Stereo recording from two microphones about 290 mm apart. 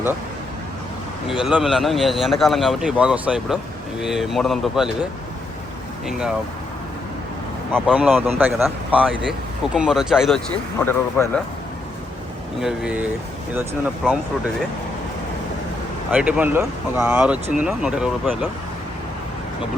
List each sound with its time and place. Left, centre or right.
1.3 s speech: centre
6.1 s speech: centre
7.7 s speech: centre
12.5 s speech: centre
16.1 s speech: centre